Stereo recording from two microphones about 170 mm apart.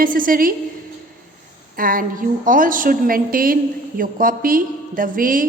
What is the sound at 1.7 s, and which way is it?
A woman's voice, 55° right (ahead or behind).